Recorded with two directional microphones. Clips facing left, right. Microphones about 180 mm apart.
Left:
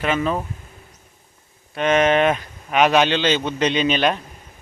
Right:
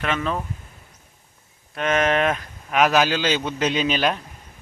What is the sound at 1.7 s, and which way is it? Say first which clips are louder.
Speech: left 4 dB; centre (ahead or behind).